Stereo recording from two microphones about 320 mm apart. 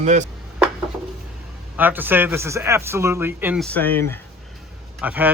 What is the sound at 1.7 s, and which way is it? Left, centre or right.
Speech, centre.